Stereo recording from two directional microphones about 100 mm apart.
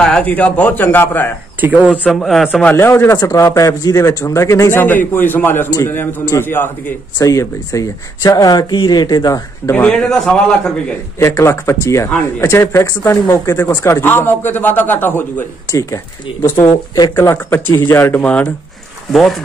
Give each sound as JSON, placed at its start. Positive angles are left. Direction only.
{"t": 0.0, "sound": "a man's voice", "side_deg": 10}
{"t": 2.2, "sound": "a man's voice", "side_deg": 0}
{"t": 2.6, "sound": "a man's voice", "side_deg": 25}
{"t": 7.2, "sound": "speech", "side_deg": 35}
{"t": 9.7, "sound": "a man's voice", "side_deg": 10}
{"t": 11.1, "sound": "a man's voice", "side_deg": 30}
{"t": 15.7, "sound": "speech", "side_deg": 30}
{"t": 17.5, "sound": "a man's voice", "side_deg": 25}
{"t": 18.2, "sound": "a man's voice", "side_deg": 15}